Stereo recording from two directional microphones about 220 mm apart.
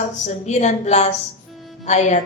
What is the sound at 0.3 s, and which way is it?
A woman's voice, 30° left (ahead or behind).